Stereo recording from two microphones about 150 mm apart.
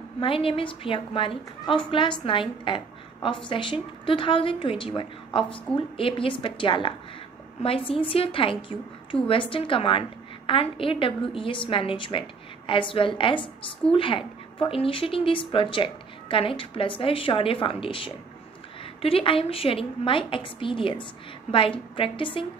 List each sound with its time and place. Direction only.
0.2 s a woman's voice: 35° left (ahead or behind)